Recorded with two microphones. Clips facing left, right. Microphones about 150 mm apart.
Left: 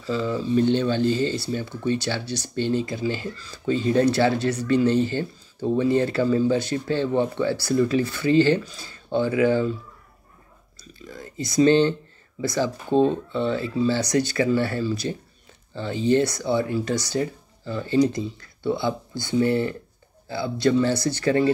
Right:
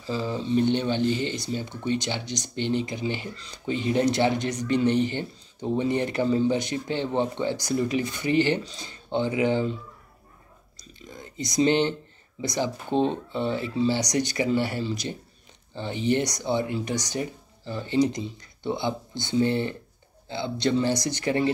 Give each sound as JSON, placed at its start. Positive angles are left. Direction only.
{"t": 0.0, "sound": "speech", "side_deg": -25}
{"t": 10.8, "sound": "speech", "side_deg": -20}